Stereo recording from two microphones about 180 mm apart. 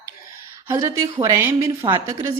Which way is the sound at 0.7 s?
15° right (ahead or behind).